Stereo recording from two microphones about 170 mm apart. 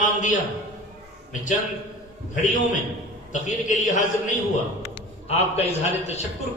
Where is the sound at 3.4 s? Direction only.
45° left (ahead or behind).